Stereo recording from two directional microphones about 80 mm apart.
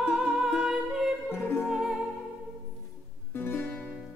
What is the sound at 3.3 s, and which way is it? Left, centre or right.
Music, left.